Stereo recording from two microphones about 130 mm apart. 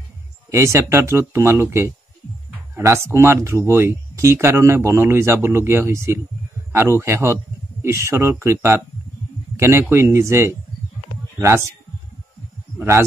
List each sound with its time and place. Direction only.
0.5 s speech: 20° right (ahead or behind)
12.7 s speech: 20° right (ahead or behind)